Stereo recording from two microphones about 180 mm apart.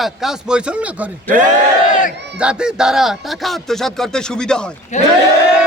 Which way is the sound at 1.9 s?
45° left (ahead or behind).